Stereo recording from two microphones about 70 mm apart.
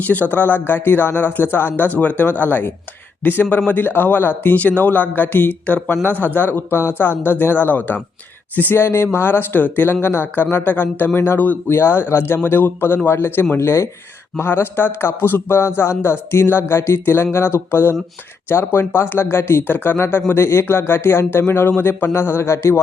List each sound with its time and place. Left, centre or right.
0.0 s speech: left